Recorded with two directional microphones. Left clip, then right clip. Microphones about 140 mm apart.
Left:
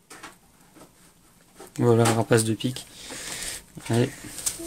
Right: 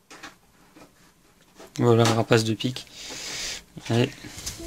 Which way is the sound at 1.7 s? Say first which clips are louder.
Right 1 dB; 10° right (ahead or behind).